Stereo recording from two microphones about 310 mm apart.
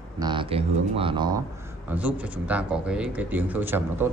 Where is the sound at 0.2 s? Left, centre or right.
Centre.